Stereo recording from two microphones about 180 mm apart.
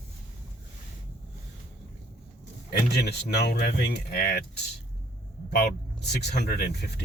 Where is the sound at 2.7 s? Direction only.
65° left (ahead or behind).